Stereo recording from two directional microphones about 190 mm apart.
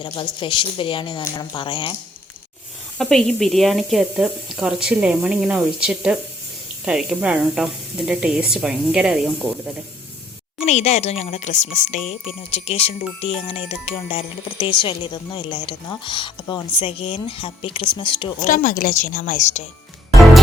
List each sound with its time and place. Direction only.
0.3 s speech: 25° left (ahead or behind)
3.0 s speech: centre (ahead or behind)
10.7 s speech: 35° left (ahead or behind)
18.4 s speech: 45° left (ahead or behind)